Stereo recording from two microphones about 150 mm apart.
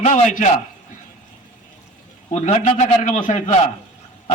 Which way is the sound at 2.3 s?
50° left (ahead or behind).